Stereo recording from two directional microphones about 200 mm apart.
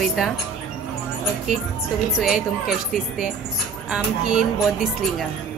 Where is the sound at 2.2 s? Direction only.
Centre (ahead or behind).